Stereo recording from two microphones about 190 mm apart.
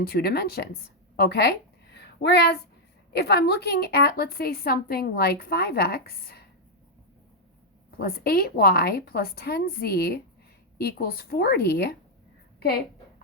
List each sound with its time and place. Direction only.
0.0 s speech: 55° left (ahead or behind)
1.1 s a sound: 55° left (ahead or behind)
3.1 s a woman's voice: 60° left (ahead or behind)
7.9 s a woman's voice: 55° left (ahead or behind)